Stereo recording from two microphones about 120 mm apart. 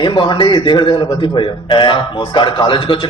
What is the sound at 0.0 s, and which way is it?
A man's voice, 40° left (ahead or behind).